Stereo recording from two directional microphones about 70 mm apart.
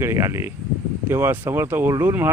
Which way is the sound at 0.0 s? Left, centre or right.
Right.